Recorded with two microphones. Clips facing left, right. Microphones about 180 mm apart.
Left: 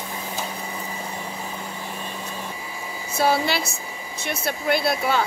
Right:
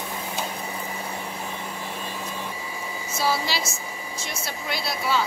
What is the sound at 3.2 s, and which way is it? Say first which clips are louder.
Speech: left 5 dB; 60° left (ahead or behind).